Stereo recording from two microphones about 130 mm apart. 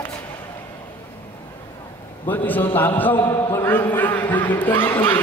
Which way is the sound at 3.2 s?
35° left (ahead or behind).